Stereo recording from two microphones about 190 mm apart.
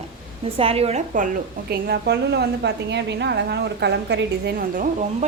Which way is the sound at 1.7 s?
60° right (ahead or behind).